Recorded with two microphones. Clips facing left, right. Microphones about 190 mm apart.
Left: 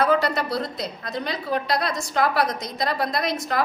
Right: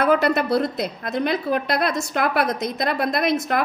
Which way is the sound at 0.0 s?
55° right (ahead or behind).